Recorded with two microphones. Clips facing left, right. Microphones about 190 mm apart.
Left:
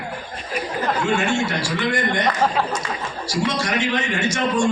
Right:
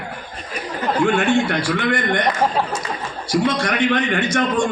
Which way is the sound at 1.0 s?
60° right (ahead or behind).